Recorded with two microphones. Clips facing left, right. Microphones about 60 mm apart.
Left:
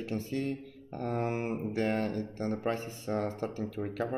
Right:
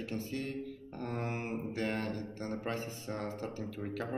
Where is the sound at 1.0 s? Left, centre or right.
Left.